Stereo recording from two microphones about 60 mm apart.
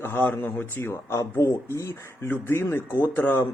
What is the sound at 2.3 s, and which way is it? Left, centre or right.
Speech, left.